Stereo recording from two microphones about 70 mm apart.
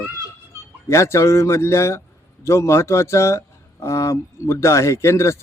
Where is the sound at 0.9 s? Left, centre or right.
Left.